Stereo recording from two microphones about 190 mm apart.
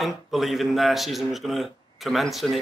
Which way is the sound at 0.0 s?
Centre (ahead or behind).